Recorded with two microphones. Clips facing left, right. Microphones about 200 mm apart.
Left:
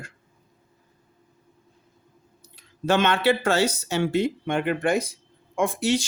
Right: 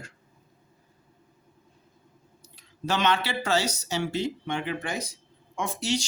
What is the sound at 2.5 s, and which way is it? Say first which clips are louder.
Speech: left 7 dB; 55° left (ahead or behind).